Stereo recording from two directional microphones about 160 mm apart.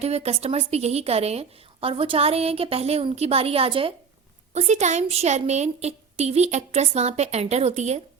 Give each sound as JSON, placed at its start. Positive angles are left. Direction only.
{"t": 0.0, "sound": "a woman's voice", "side_deg": -40}
{"t": 4.5, "sound": "a woman's voice", "side_deg": -45}